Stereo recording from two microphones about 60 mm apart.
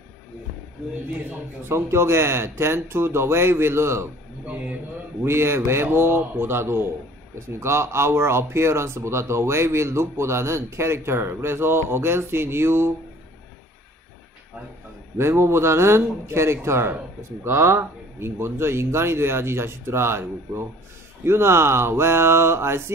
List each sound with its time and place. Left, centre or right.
1.7 s speech: right
5.2 s speech: right
15.1 s speech: right